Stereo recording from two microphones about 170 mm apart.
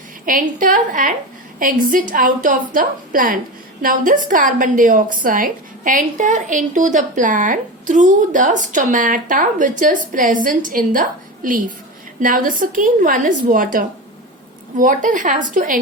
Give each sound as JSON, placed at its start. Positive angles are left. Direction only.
{"t": 0.3, "sound": "a woman's voice", "side_deg": -55}